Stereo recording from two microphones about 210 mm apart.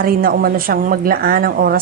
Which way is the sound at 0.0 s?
45° right (ahead or behind).